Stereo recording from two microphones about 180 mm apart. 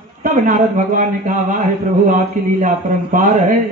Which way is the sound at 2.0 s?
45° right (ahead or behind).